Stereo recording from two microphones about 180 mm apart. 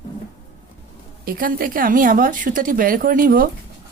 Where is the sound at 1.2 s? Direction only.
55° right (ahead or behind).